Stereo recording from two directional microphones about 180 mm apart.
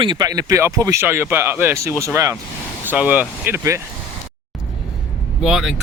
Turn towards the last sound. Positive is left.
turn(degrees=0)  # may be behind; listen again after turning